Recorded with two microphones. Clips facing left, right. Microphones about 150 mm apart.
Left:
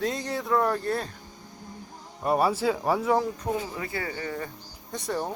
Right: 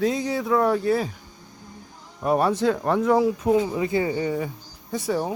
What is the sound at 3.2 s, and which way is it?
Speech, 15° right (ahead or behind).